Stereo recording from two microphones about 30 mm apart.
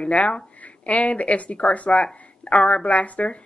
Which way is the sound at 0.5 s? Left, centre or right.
Left.